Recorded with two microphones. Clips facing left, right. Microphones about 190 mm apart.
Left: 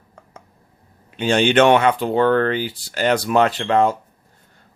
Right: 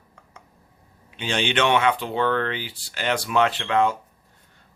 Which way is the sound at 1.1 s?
45° left (ahead or behind).